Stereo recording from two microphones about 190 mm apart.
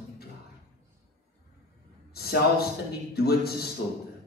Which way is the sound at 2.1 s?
55° left (ahead or behind).